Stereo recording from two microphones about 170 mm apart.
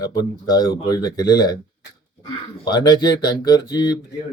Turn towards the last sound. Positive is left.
turn(degrees=25)  # may be behind; listen again after turning